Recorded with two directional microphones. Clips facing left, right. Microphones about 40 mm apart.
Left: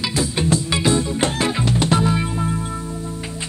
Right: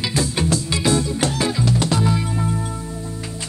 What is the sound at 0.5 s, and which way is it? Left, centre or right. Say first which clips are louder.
Music: left 2 dB; left.